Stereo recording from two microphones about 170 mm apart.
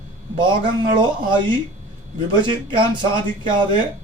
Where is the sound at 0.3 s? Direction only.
30° right (ahead or behind).